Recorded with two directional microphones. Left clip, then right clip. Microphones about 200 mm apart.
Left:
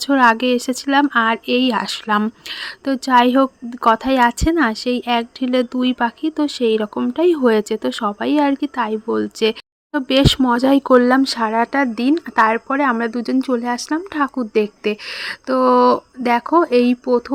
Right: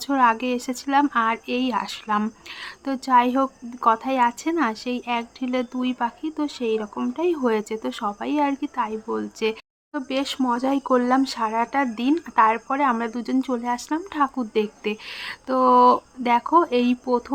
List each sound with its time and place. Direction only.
0.0 s speech: 30° left (ahead or behind)